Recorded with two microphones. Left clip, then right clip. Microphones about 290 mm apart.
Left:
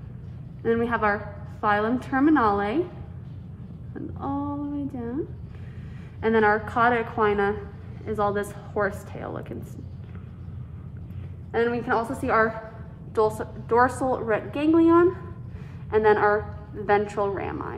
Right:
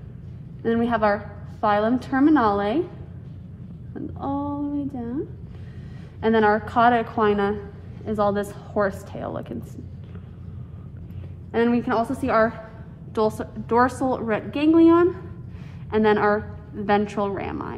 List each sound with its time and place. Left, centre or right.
0.7 s a woman's voice: centre
3.9 s a woman's voice: centre
6.2 s a woman's voice: centre
11.5 s a woman's voice: centre